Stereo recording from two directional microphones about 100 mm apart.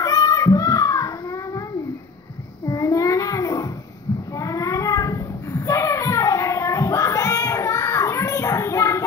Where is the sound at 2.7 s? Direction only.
35° left (ahead or behind).